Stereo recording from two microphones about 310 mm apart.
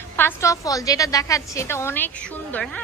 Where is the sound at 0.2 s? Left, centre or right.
Centre.